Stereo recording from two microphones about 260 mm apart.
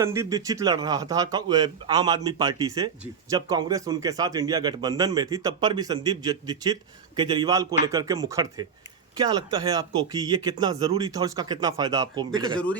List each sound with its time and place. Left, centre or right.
0.0 s speech: centre